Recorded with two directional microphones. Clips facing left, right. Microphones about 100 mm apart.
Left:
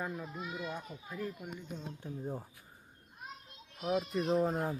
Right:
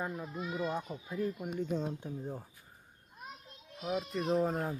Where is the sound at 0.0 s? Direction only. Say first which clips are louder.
Right 2 dB; 15° right (ahead or behind).